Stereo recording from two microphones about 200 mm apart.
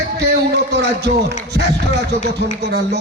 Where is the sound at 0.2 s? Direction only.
60° right (ahead or behind).